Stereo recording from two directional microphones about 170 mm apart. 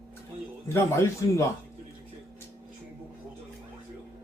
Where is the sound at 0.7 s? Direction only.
15° left (ahead or behind).